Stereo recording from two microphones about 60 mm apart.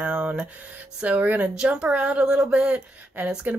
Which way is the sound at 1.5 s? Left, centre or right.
Centre.